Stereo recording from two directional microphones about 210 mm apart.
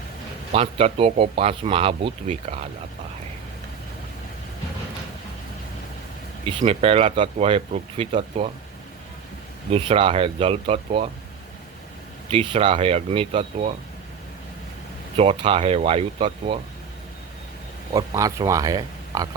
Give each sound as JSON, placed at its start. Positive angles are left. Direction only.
{"t": 0.5, "sound": "speech", "side_deg": -30}
{"t": 6.4, "sound": "speech", "side_deg": -25}
{"t": 9.7, "sound": "speech", "side_deg": -25}
{"t": 12.3, "sound": "speech", "side_deg": -25}
{"t": 15.1, "sound": "speech", "side_deg": -25}
{"t": 17.9, "sound": "speech", "side_deg": -15}